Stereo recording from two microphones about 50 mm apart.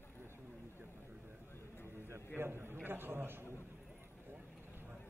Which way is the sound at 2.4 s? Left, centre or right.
Right.